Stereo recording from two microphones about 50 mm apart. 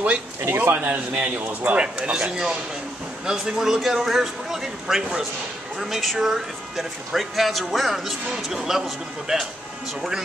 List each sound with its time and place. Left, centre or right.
0.4 s speech: right
0.8 s a man's voice: right
2.1 s a man's voice: centre